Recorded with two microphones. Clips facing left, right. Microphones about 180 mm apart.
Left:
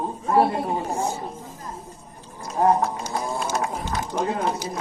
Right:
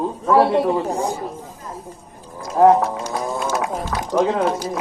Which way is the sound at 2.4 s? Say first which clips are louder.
Right 7 dB; 90° right.